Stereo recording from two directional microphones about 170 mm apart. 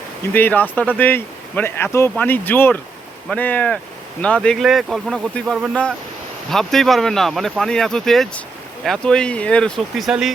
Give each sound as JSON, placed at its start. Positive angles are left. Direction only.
{"t": 0.3, "sound": "speech", "side_deg": 10}